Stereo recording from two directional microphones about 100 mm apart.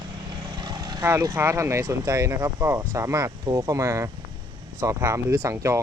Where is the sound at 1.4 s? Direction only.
30° right (ahead or behind).